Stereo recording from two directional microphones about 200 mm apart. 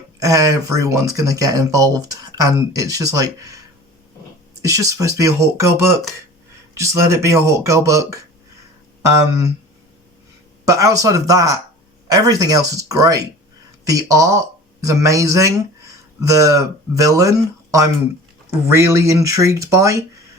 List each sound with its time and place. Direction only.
0.2 s speech: 15° right (ahead or behind)
4.6 s speech: 15° right (ahead or behind)
10.7 s speech: 15° right (ahead or behind)